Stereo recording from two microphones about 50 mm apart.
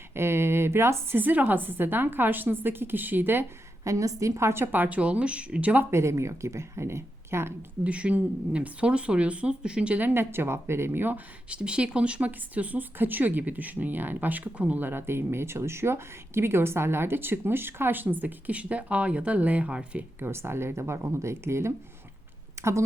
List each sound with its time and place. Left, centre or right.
0.1 s speech: right
1.2 s a woman's voice: right
3.8 s a woman's voice: right
4.6 s a woman's voice: right
4.9 s speech: right
5.9 s speech: right
7.9 s speech: right
10.0 s speech: right
11.4 s a woman's voice: right
14.8 s speech: right
20.1 s speech: right
22.6 s speech: right